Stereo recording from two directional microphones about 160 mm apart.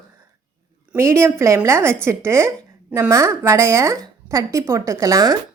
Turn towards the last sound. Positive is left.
turn(degrees=-20)  # may be behind; listen again after turning